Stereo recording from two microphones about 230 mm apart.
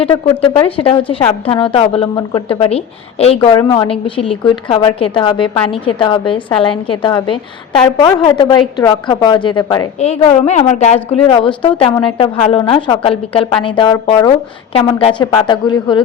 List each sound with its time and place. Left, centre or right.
0.0 s a woman's voice: left